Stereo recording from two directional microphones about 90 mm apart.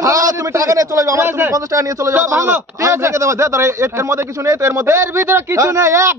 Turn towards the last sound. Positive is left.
turn(degrees=-30)  # may be behind; listen again after turning